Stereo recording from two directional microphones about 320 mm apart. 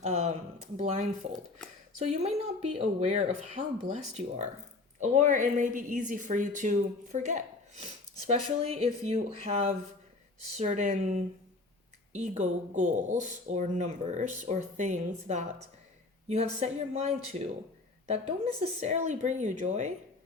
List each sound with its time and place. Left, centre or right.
0.0 s a sound: centre
0.8 s speech: centre
1.3 s speech: centre
2.0 s speech: centre
18.8 s speech: right